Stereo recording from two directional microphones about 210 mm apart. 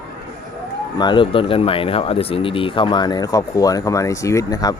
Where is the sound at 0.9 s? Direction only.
20° left (ahead or behind).